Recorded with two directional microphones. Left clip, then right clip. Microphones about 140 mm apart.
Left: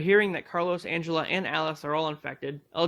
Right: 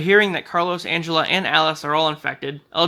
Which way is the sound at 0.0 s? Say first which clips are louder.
Right 7 dB; 25° left (ahead or behind).